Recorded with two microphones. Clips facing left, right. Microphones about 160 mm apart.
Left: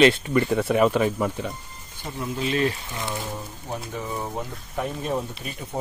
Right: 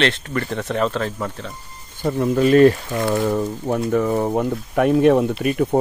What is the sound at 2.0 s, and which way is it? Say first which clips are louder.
Speech: right 12 dB; 55° right (ahead or behind).